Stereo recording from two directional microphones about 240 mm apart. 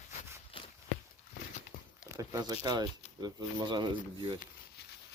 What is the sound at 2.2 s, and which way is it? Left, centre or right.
Speech, centre.